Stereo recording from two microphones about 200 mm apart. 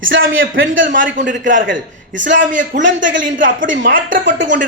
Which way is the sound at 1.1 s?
40° right (ahead or behind).